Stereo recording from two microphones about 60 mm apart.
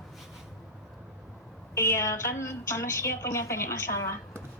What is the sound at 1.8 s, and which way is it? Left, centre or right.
A woman's voice, left.